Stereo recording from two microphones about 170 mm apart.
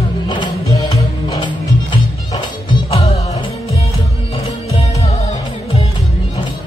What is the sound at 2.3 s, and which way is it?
Music, 35° left (ahead or behind).